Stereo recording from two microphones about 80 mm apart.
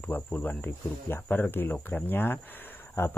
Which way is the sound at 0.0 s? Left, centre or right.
Left.